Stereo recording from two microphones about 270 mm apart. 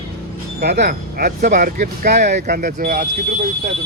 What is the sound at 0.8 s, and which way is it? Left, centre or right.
Speech, right.